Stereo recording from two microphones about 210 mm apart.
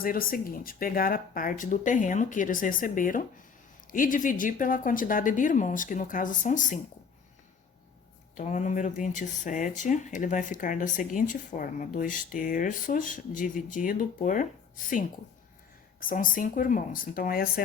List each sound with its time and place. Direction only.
0.0 s speech: 45° left (ahead or behind)
8.4 s speech: 35° left (ahead or behind)
16.0 s speech: 40° left (ahead or behind)